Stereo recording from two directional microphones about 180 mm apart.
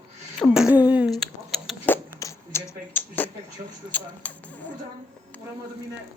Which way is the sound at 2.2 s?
15° left (ahead or behind).